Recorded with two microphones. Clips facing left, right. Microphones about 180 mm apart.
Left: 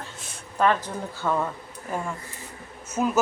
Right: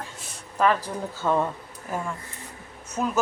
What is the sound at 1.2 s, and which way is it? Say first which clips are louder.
Speech: right 2 dB; 20° right (ahead or behind).